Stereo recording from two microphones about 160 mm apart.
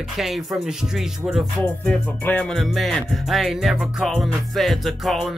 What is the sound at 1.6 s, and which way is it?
Music, 10° left (ahead or behind).